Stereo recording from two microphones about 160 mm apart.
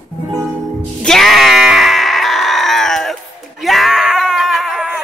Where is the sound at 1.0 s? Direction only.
Centre (ahead or behind).